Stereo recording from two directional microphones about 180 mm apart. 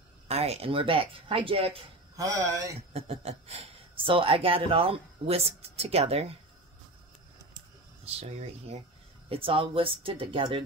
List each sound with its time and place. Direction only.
0.3 s a woman's voice: 35° right (ahead or behind)
2.1 s speech: 20° right (ahead or behind)
2.9 s a woman's voice: 35° right (ahead or behind)
8.0 s a woman's voice: 35° right (ahead or behind)